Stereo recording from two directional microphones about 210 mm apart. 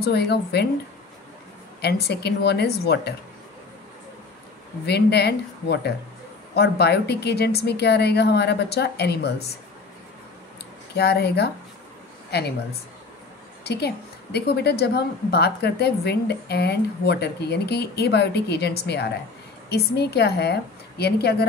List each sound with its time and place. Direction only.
0.0 s a woman's voice: 50° left (ahead or behind)
1.8 s a woman's voice: 50° left (ahead or behind)
4.8 s a woman's voice: 50° left (ahead or behind)
11.0 s a woman's voice: 50° left (ahead or behind)
13.7 s a woman's voice: 50° left (ahead or behind)